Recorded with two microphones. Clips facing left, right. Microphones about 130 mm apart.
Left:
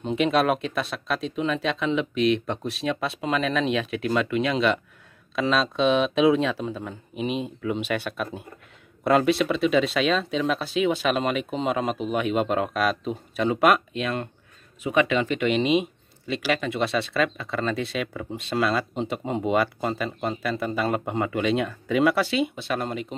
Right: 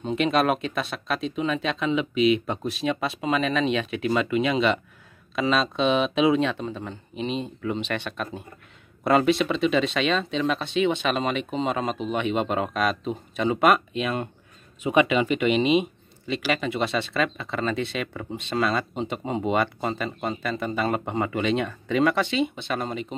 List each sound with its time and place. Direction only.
0.0 s speech: centre (ahead or behind)
14.8 s speech: 20° right (ahead or behind)
15.0 s speech: 10° right (ahead or behind)